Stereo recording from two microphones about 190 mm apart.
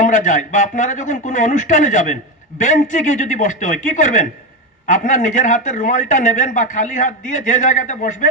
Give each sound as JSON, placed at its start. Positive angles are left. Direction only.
{"t": 0.0, "sound": "a man's voice", "side_deg": 40}